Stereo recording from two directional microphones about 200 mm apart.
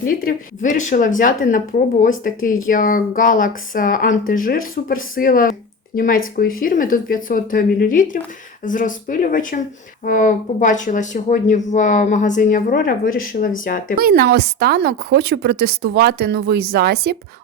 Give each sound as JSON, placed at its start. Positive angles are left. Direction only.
{"t": 0.0, "sound": "speech", "side_deg": 45}
{"t": 14.0, "sound": "speech", "side_deg": -50}